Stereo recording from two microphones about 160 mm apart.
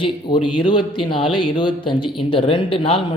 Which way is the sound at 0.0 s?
30° left (ahead or behind).